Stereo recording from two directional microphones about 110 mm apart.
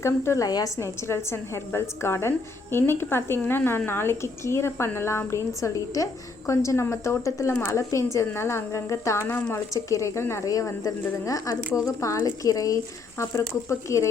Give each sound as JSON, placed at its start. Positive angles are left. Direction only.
{"t": 0.0, "sound": "a woman's voice", "side_deg": 25}